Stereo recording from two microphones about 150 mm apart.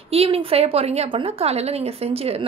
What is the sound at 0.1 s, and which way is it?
A woman's voice, 40° right (ahead or behind).